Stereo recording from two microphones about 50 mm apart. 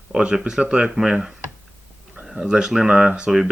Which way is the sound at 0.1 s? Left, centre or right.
Centre.